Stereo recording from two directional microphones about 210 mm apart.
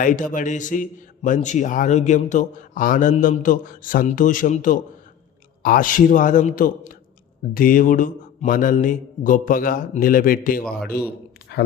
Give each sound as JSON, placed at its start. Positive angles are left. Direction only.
{"t": 0.0, "sound": "speech", "side_deg": 40}